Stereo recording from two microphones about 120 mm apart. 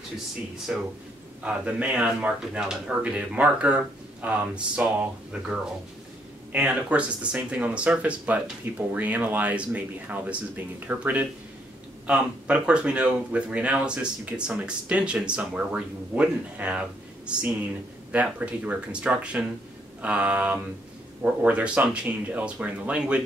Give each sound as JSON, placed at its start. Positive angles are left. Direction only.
{"t": 0.7, "sound": "speech", "side_deg": -10}
{"t": 6.5, "sound": "speech", "side_deg": -10}
{"t": 18.1, "sound": "speech", "side_deg": -10}